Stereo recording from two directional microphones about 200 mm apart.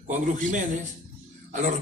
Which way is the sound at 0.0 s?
35° right (ahead or behind).